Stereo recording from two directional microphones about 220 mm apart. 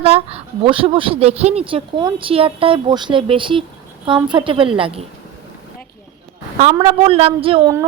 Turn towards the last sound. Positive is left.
turn(degrees=-25)  # may be behind; listen again after turning